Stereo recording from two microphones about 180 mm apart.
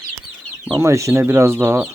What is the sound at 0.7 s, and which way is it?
Speech, 15° right (ahead or behind).